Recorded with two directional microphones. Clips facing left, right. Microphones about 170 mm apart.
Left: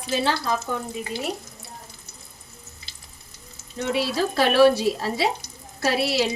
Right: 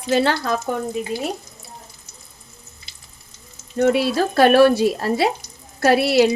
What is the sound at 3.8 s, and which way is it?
Speech, 55° right (ahead or behind).